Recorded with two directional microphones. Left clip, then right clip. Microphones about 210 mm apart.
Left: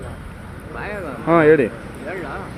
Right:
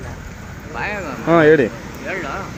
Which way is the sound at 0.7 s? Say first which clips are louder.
Right 4 dB; 50° right (ahead or behind).